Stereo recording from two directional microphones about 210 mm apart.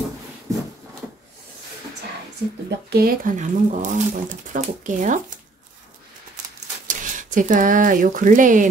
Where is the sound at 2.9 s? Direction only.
45° right (ahead or behind).